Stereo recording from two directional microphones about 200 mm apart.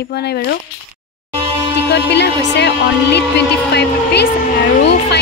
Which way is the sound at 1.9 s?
60° left (ahead or behind).